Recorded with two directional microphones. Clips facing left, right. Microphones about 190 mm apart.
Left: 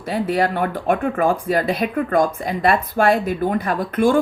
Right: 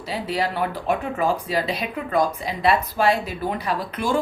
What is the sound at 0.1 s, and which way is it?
Speech, 50° left (ahead or behind).